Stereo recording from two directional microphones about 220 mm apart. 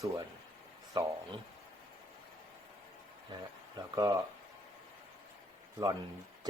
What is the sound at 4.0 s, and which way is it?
Speech, 15° right (ahead or behind).